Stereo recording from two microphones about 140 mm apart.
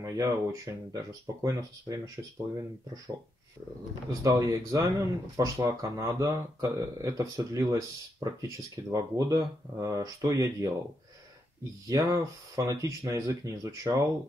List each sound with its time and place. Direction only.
0.0 s speech: 25° right (ahead or behind)
4.2 s speech: 25° right (ahead or behind)
11.9 s speech: 25° right (ahead or behind)